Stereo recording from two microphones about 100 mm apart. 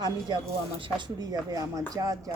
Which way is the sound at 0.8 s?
45° right (ahead or behind).